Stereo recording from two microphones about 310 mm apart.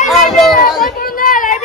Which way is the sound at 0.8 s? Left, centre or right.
Left.